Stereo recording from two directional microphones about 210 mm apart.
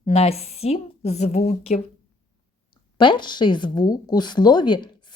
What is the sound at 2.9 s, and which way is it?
Speech, 20° left (ahead or behind).